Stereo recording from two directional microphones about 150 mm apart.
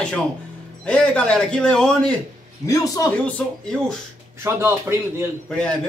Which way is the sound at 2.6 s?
20° left (ahead or behind).